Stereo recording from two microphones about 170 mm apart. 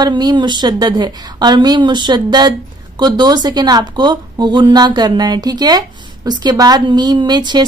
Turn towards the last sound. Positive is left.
turn(degrees=-25)  # may be behind; listen again after turning